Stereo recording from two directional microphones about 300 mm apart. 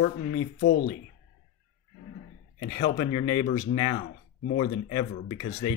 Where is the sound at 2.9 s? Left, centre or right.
Centre.